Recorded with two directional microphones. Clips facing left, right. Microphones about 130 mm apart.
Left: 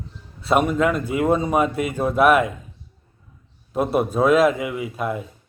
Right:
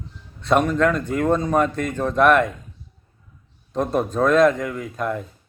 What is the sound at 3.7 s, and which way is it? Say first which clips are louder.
A man's voice: left 1 dB; 10° left (ahead or behind).